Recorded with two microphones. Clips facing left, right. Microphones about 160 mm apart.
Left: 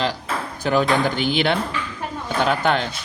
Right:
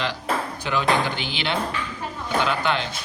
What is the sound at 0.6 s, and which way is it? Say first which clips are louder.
Speech: left 6 dB; 45° left (ahead or behind).